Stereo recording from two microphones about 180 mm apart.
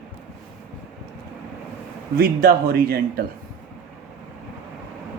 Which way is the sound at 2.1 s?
60° right (ahead or behind).